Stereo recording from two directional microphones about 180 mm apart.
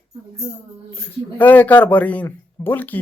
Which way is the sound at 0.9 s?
10° left (ahead or behind).